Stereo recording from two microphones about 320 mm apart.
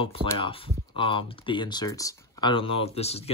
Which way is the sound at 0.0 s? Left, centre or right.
Centre.